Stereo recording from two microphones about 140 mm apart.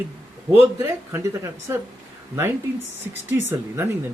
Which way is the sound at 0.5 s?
15° right (ahead or behind).